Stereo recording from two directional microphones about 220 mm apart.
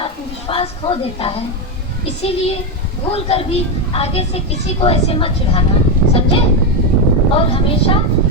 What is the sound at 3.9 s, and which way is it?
A woman's voice, 25° left (ahead or behind).